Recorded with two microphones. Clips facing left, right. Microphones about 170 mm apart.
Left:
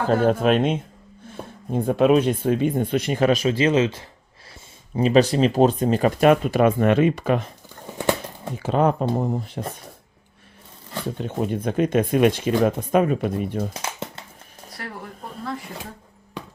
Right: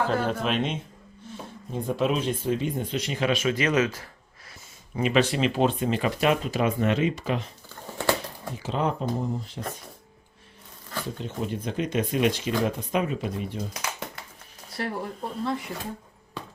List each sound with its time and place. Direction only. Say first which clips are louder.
0.1 s speech: left 8 dB; 45° left (ahead or behind)
8.5 s speech: left 7 dB; 55° left (ahead or behind)
11.2 s speech: left 8 dB; 55° left (ahead or behind)
13.8 s a sound: left 3 dB; 25° left (ahead or behind)
14.8 s speech: right 5 dB; 25° right (ahead or behind)